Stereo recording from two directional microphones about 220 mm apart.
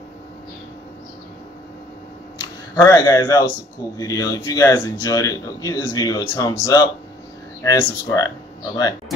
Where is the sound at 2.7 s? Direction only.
15° left (ahead or behind).